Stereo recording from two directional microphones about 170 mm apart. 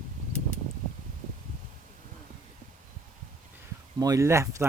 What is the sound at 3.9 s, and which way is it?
Speech, 20° right (ahead or behind).